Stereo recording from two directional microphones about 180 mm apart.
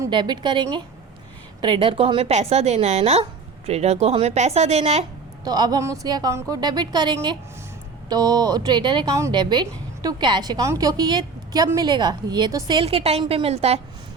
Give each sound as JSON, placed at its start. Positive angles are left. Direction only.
{"t": 0.0, "sound": "speech", "side_deg": -25}
{"t": 5.5, "sound": "speech", "side_deg": -20}